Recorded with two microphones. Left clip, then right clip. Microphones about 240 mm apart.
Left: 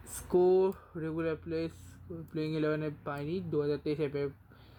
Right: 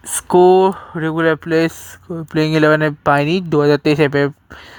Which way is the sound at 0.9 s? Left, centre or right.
Right.